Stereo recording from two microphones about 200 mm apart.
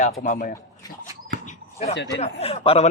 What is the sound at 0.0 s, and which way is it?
Speech, 40° left (ahead or behind).